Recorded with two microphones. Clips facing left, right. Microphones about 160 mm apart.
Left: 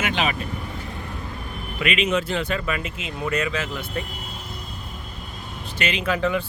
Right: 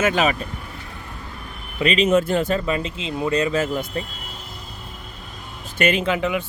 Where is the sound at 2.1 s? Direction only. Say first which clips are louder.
Right 5 dB; 45° right (ahead or behind).